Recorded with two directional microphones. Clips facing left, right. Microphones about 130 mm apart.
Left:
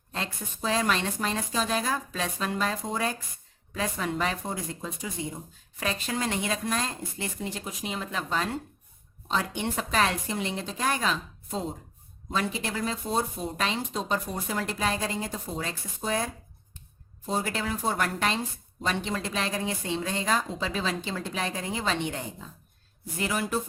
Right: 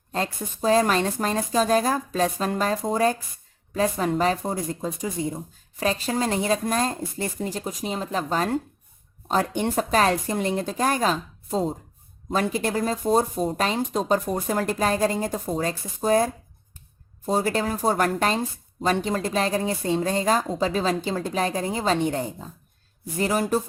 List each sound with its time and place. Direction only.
0.1 s a woman's voice: 40° right (ahead or behind)